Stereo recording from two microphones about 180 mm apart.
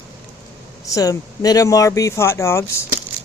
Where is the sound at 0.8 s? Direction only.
20° left (ahead or behind).